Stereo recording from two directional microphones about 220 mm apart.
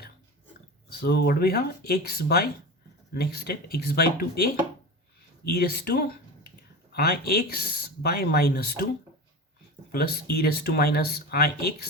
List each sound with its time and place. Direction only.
0.9 s speech: 45° left (ahead or behind)
9.9 s speech: 45° left (ahead or behind)